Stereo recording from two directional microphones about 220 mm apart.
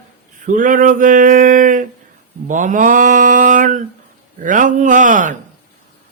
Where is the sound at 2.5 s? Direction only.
35° right (ahead or behind).